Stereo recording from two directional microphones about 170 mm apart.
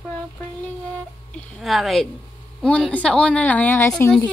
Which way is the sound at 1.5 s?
Centre (ahead or behind).